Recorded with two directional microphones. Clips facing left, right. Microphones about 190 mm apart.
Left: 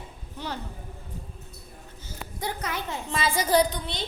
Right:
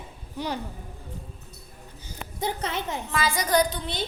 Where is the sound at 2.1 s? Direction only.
25° right (ahead or behind).